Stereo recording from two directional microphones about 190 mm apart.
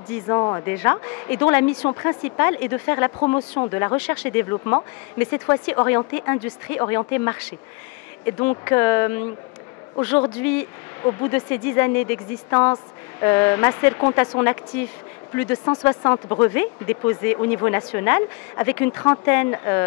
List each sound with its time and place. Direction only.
0.3 s speech: 20° left (ahead or behind)
3.2 s speech: 25° left (ahead or behind)
3.7 s speech: 15° left (ahead or behind)
10.4 s speech: 10° left (ahead or behind)